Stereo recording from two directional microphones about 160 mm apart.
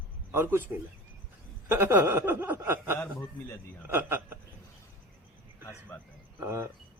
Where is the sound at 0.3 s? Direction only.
15° right (ahead or behind).